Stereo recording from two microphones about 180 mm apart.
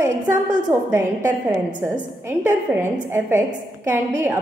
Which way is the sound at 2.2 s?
10° right (ahead or behind).